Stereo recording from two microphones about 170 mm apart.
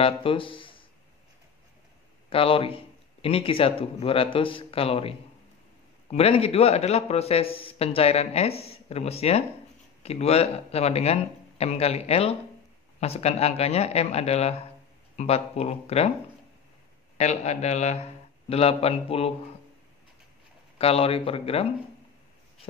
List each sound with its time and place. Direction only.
0.0 s speech: 30° left (ahead or behind)
2.2 s a man's voice: 35° left (ahead or behind)
17.2 s a man's voice: 40° left (ahead or behind)
20.7 s a man's voice: 35° left (ahead or behind)